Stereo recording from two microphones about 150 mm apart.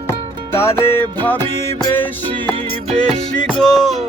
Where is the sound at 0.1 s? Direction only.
15° left (ahead or behind).